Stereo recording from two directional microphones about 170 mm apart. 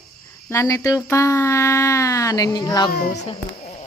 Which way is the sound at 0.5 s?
20° left (ahead or behind).